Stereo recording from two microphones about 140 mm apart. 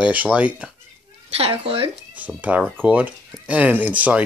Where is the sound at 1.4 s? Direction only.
40° right (ahead or behind).